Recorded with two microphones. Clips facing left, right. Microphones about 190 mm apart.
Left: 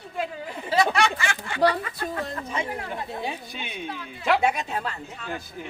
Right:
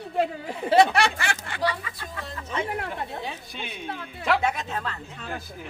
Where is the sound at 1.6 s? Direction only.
55° left (ahead or behind).